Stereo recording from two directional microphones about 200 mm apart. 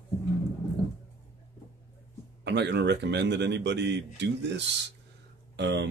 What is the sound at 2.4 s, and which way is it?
Speech, 60° right (ahead or behind).